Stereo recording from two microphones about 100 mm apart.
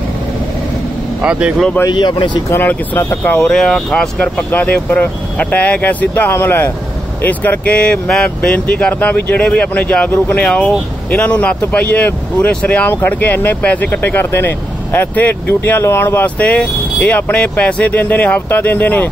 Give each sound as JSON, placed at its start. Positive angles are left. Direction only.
{"t": 1.2, "sound": "speech", "side_deg": -10}
{"t": 1.9, "sound": "speech", "side_deg": 50}
{"t": 2.5, "sound": "speech", "side_deg": 20}
{"t": 3.3, "sound": "speech", "side_deg": 5}